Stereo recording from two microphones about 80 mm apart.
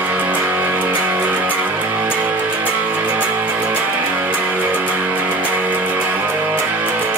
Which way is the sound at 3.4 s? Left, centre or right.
Right.